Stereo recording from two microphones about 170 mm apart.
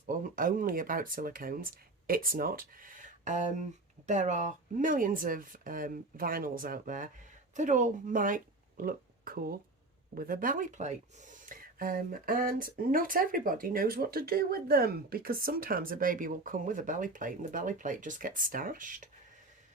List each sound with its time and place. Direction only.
0.0 s speech: 55° right (ahead or behind)